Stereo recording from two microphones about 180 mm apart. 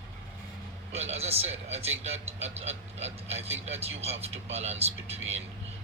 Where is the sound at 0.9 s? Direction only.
35° right (ahead or behind).